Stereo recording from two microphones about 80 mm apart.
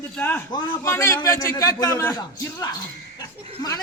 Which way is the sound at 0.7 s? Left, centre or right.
Left.